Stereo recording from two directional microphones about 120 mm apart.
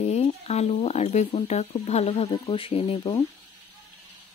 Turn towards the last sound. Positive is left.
turn(degrees=55)  # may be behind; listen again after turning